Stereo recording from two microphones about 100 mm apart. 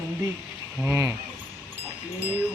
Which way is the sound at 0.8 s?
20° right (ahead or behind).